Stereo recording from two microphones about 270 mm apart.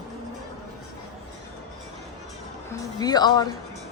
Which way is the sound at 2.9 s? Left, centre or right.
Centre.